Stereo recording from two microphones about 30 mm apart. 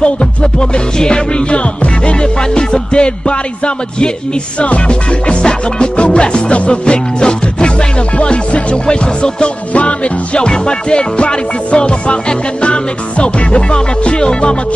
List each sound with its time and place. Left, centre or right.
0.0 s music: left
1.5 s music: left
2.5 s music: left
4.6 s music: left
5.4 s music: left
5.9 s music: left
8.2 s music: left
9.7 s music: left